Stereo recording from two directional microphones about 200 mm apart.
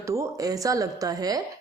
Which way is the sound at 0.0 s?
15° right (ahead or behind).